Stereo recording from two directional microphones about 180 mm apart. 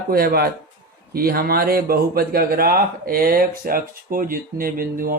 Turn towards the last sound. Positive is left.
turn(degrees=-50)  # may be behind; listen again after turning